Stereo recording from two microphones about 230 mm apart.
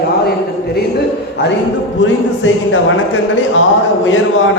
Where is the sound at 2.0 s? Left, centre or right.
Left.